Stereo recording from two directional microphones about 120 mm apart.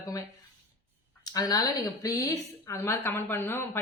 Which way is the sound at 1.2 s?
30° left (ahead or behind).